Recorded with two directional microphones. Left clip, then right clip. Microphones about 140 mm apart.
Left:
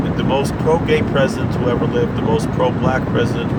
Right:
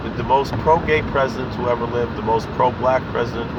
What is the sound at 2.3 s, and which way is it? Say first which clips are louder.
Speech: right 1 dB; 30° left (ahead or behind).